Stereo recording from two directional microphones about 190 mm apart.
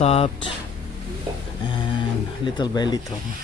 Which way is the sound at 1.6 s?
25° left (ahead or behind).